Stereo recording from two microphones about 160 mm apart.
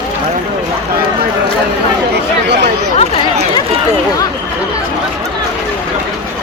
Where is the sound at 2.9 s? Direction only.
35° left (ahead or behind).